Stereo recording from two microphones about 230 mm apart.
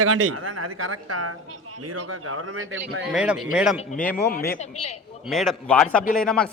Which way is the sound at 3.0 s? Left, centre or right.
Centre.